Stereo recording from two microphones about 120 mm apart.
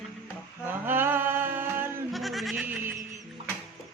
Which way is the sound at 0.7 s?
15° right (ahead or behind).